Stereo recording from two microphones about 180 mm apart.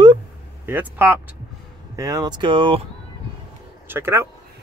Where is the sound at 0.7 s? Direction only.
15° right (ahead or behind).